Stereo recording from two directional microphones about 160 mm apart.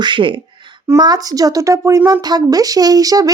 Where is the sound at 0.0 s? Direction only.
30° right (ahead or behind).